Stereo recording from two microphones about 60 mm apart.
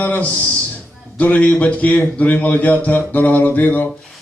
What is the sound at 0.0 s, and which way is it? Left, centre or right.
A man's voice, left.